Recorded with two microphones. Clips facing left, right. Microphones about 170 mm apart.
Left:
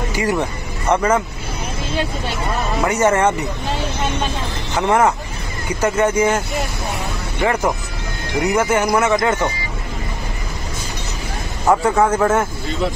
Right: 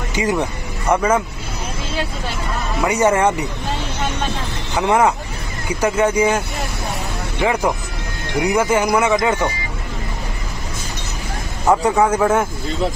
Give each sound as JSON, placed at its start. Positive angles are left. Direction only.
{"t": 0.1, "sound": "speech", "side_deg": -20}
{"t": 2.9, "sound": "speech", "side_deg": -10}
{"t": 4.7, "sound": "speech", "side_deg": -10}
{"t": 7.4, "sound": "speech", "side_deg": -10}
{"t": 11.6, "sound": "speech", "side_deg": 0}